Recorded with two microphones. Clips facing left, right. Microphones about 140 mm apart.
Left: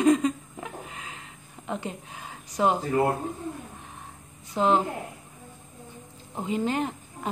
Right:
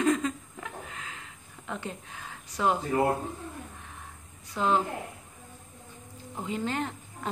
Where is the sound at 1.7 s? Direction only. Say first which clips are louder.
Left 4 dB; 20° left (ahead or behind).